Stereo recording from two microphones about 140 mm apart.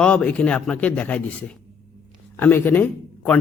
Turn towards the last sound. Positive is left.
turn(degrees=10)  # may be behind; listen again after turning